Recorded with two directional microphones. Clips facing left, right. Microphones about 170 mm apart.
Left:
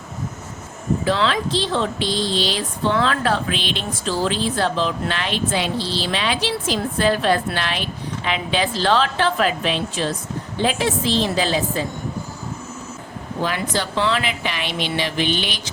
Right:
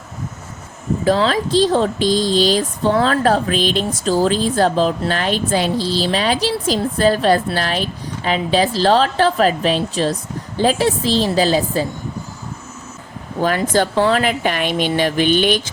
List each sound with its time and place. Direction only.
1.0 s speech: 40° right (ahead or behind)
13.4 s a woman's voice: 45° right (ahead or behind)